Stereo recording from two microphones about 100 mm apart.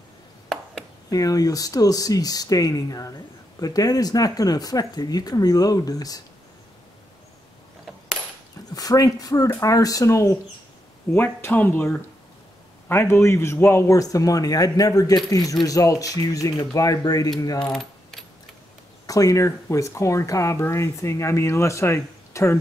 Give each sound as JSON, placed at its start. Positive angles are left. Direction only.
{"t": 1.1, "sound": "a man's voice", "side_deg": 35}
{"t": 8.7, "sound": "a man's voice", "side_deg": 40}
{"t": 19.0, "sound": "speech", "side_deg": 35}